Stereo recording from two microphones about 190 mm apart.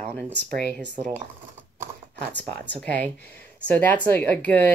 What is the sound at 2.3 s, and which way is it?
Speech, 10° left (ahead or behind).